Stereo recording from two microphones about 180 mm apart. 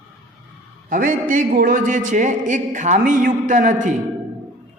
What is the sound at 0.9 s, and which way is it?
A man's voice, 50° right (ahead or behind).